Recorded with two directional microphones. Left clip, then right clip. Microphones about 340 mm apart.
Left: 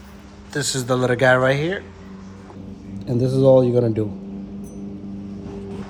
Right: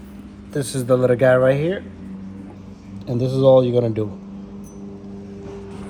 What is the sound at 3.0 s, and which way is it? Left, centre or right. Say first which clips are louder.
Speech: even; right.